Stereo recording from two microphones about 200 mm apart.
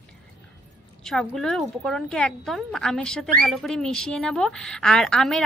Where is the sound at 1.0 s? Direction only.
Centre (ahead or behind).